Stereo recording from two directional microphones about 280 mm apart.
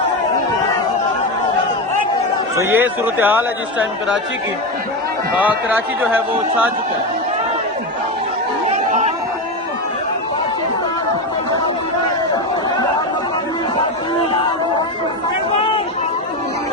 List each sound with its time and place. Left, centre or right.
2.6 s speech: centre
5.4 s speech: centre
8.7 s chatter: right